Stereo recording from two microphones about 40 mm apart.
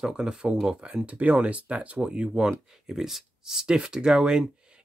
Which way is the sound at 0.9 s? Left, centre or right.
Right.